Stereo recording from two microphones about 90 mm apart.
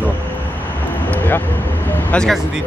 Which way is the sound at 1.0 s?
20° left (ahead or behind).